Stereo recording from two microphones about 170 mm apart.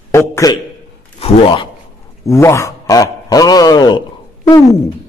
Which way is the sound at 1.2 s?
30° left (ahead or behind).